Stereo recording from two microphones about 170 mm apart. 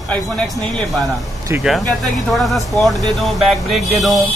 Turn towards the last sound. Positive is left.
turn(degrees=0)  # may be behind; listen again after turning